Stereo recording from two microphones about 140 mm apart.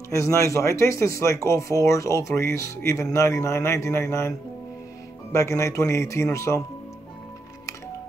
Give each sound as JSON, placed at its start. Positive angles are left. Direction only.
{"t": 0.1, "sound": "speech", "side_deg": 20}
{"t": 5.3, "sound": "speech", "side_deg": 20}